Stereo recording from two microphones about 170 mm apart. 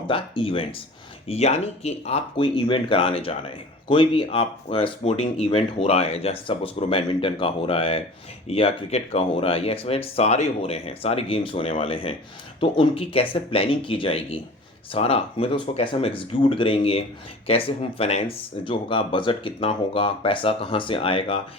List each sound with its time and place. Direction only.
0.1 s speech: 30° left (ahead or behind)